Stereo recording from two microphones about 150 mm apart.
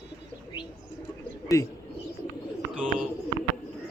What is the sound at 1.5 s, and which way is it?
Speech, 20° left (ahead or behind).